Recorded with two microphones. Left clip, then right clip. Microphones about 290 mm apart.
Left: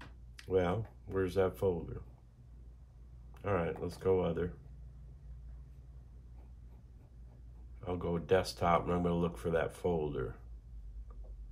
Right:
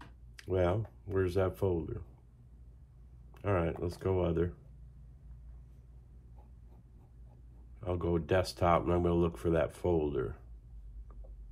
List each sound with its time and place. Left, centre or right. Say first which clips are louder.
0.4 s speech: right 1 dB; right
3.3 s speech: right 2 dB; right
7.8 s speech: right 3 dB; right